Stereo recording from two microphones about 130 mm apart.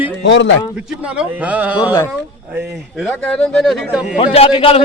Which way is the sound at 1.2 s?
10° right (ahead or behind).